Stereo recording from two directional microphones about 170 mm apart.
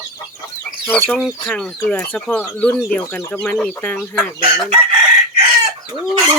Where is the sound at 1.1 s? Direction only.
Centre (ahead or behind).